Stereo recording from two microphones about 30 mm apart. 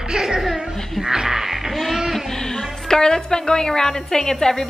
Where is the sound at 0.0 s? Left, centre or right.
Right.